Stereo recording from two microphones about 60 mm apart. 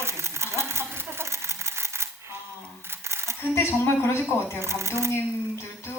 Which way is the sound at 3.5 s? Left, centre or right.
Left.